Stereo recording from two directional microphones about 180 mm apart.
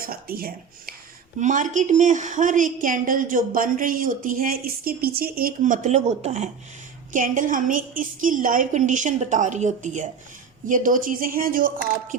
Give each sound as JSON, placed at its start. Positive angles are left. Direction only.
{"t": 0.0, "sound": "speech", "side_deg": -55}
{"t": 1.4, "sound": "a woman's voice", "side_deg": -45}